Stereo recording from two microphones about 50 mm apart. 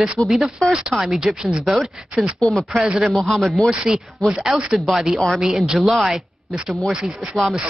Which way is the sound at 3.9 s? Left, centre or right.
Centre.